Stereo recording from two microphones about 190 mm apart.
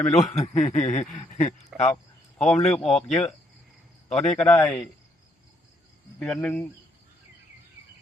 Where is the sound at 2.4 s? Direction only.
5° left (ahead or behind).